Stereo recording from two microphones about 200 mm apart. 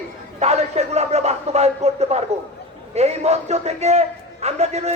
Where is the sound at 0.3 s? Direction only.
35° right (ahead or behind).